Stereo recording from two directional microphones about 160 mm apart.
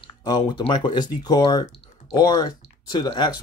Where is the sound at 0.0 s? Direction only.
30° left (ahead or behind).